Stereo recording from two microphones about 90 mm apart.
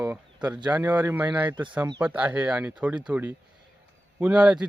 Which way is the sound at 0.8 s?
25° right (ahead or behind).